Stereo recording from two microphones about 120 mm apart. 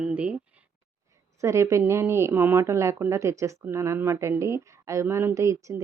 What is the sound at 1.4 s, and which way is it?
Speech, 25° right (ahead or behind).